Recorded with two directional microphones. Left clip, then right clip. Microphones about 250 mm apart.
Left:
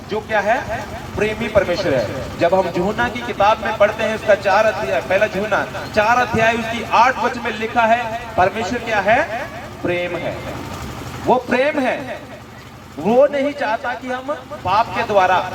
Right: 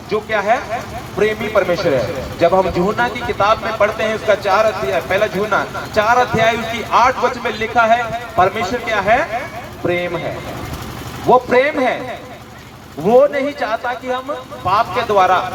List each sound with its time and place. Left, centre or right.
0.3 s a man's voice: right
11.5 s a man's voice: right
13.1 s a man's voice: right